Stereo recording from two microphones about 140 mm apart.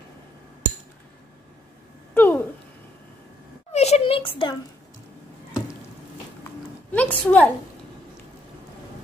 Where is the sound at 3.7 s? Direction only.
50° left (ahead or behind).